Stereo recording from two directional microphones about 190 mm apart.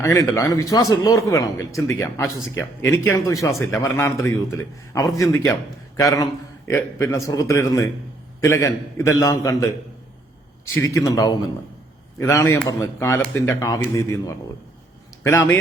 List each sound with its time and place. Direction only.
0.0 s a man's voice: 15° left (ahead or behind)
10.8 s a man's voice: 15° left (ahead or behind)